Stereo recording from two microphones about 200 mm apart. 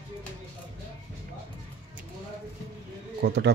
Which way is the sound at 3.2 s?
55° right (ahead or behind).